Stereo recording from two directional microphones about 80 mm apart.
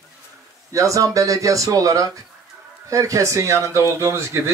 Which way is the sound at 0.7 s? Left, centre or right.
Right.